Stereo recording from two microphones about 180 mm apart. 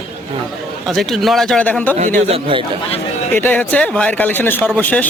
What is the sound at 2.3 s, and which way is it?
Speech, 30° right (ahead or behind).